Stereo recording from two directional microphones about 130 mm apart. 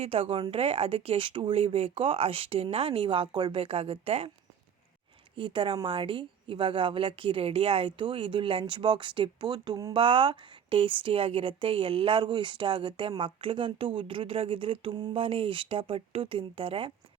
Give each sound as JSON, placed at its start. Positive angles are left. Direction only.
{"t": 0.0, "sound": "speech", "side_deg": -50}
{"t": 5.4, "sound": "a woman's voice", "side_deg": -40}